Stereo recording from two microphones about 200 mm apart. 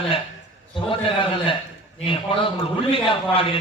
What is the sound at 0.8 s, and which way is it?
Speech, 25° left (ahead or behind).